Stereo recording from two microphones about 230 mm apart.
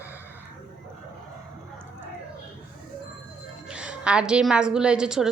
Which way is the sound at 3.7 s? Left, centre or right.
Centre.